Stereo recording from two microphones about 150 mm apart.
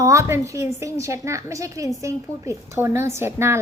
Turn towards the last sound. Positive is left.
turn(degrees=-15)  # may be behind; listen again after turning